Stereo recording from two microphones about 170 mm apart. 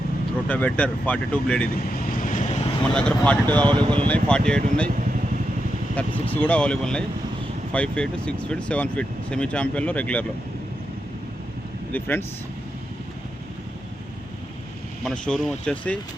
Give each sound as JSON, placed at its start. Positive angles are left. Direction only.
{"t": 0.4, "sound": "speech", "side_deg": 10}
{"t": 2.0, "sound": "boat", "side_deg": 55}
{"t": 2.9, "sound": "speech", "side_deg": 5}
{"t": 6.0, "sound": "speech", "side_deg": 10}
{"t": 11.9, "sound": "speech", "side_deg": 10}
{"t": 15.0, "sound": "speech", "side_deg": 5}